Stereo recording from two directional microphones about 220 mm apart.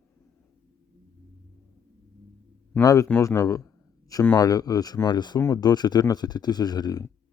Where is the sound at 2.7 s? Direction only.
10° left (ahead or behind).